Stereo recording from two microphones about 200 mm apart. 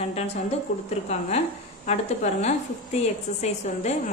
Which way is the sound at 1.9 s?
30° left (ahead or behind).